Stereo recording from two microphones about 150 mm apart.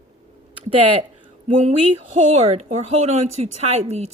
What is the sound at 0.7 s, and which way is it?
Speech, 40° right (ahead or behind).